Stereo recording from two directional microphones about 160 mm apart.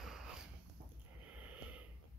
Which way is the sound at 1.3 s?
10° right (ahead or behind).